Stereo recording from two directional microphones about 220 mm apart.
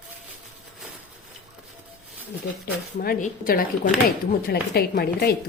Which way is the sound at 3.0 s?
40° left (ahead or behind).